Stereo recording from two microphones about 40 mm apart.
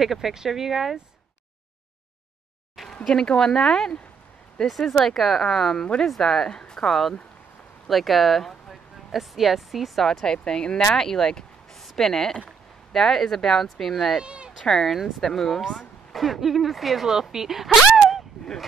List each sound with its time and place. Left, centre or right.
0.0 s speech: centre
2.9 s speech: centre
4.6 s speech: centre
7.9 s speech: centre
10.2 s speech: centre
11.0 s a sound: centre
12.0 s speech: centre
14.2 s speech: right
14.6 s speech: centre